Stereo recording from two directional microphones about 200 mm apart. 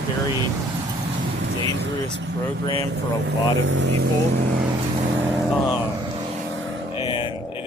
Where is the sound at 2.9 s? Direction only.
65° right (ahead or behind).